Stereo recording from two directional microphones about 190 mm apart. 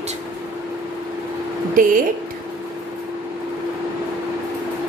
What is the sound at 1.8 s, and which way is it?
Speech, 45° right (ahead or behind).